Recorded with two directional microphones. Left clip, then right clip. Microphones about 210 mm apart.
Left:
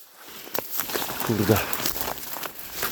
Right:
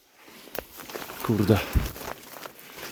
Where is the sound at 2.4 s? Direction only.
45° left (ahead or behind).